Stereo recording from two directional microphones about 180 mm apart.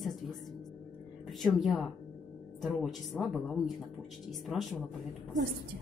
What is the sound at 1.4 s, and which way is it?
Speech, centre (ahead or behind).